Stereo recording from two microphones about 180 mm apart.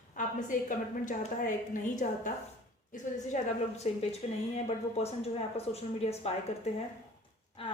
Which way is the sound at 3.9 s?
35° left (ahead or behind).